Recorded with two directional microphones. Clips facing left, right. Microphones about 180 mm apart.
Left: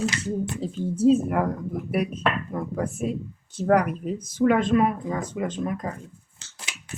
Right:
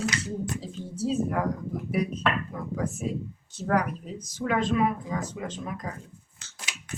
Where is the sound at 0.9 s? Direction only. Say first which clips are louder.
Left 7 dB; 55° left (ahead or behind).